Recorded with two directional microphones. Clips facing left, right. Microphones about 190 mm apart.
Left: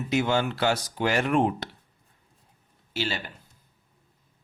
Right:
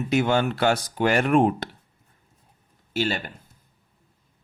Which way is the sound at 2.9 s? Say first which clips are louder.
Right 5 dB; 50° right (ahead or behind).